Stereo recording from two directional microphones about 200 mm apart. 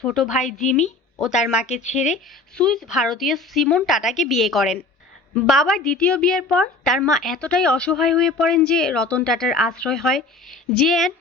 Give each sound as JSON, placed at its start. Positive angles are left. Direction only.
{"t": 0.0, "sound": "a woman's voice", "side_deg": 0}
{"t": 1.6, "sound": "speech", "side_deg": 35}
{"t": 2.6, "sound": "a woman's voice", "side_deg": 5}